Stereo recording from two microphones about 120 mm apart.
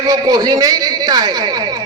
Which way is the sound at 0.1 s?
35° right (ahead or behind).